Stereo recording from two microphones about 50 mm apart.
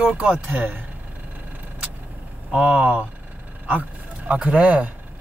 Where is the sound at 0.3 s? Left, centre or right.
Right.